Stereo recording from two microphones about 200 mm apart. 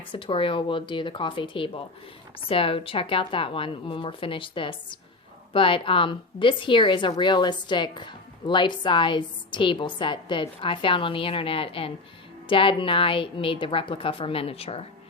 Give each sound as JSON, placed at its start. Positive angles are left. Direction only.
{"t": 0.1, "sound": "speech", "side_deg": 25}